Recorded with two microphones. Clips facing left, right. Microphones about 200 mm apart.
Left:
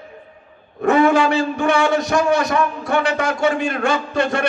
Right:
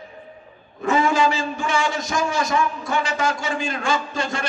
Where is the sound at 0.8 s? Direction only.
60° left (ahead or behind).